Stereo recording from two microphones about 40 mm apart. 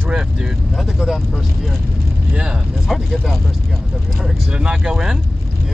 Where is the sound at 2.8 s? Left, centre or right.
Centre.